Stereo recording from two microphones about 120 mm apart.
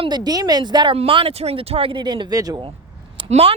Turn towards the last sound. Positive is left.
turn(degrees=-55)  # may be behind; listen again after turning